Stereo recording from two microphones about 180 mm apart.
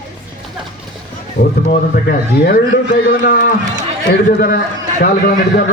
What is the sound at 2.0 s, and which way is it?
Speech, 60° left (ahead or behind).